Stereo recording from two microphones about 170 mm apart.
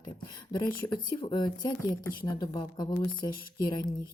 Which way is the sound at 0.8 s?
30° left (ahead or behind).